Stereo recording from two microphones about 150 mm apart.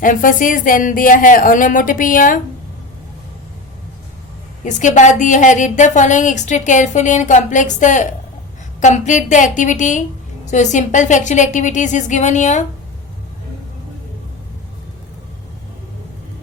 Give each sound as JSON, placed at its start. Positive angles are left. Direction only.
{"t": 0.0, "sound": "a woman's voice", "side_deg": 60}
{"t": 4.6, "sound": "a woman's voice", "side_deg": 55}